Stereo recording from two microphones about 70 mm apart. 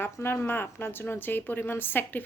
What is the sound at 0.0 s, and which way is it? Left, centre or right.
Speech, left.